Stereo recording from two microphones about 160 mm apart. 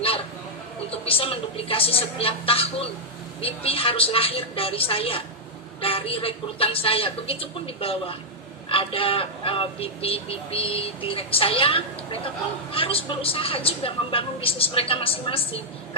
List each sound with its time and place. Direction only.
0.9 s speech: 35° left (ahead or behind)